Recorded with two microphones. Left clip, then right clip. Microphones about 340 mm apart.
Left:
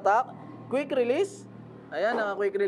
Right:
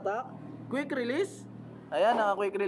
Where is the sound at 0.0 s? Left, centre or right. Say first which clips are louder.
Left 10 dB; centre.